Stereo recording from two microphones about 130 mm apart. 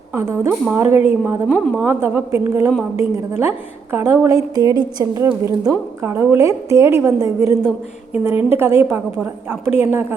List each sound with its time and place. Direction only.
0.1 s a woman's voice: 20° right (ahead or behind)
1.9 s a woman's voice: 20° right (ahead or behind)